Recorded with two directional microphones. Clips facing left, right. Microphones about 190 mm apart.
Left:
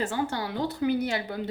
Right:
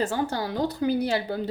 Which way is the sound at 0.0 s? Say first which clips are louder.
Right 2 dB; 40° right (ahead or behind).